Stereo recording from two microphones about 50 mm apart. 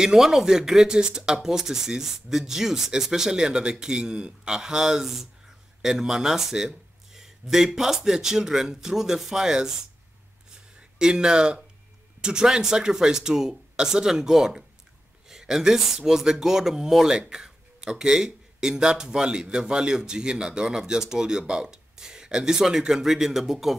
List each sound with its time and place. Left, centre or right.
0.0 s speech: centre
11.0 s speech: centre
15.2 s a sound: centre
16.1 s speech: centre